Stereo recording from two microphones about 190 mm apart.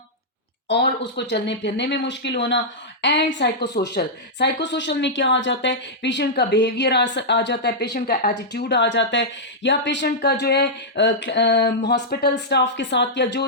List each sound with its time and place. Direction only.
0.7 s a woman's voice: 65° left (ahead or behind)